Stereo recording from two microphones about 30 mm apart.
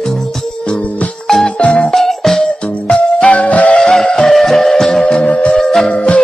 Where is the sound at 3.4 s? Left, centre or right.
Left.